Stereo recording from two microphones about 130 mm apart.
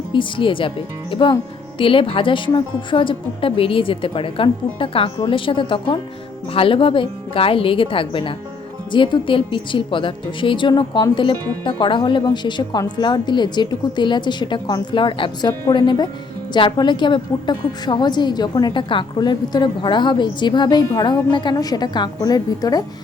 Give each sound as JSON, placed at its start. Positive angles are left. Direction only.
{"t": 0.1, "sound": "a woman's voice", "side_deg": 40}